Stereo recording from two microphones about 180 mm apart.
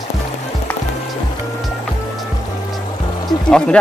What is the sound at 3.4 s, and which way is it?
Speech, 5° left (ahead or behind).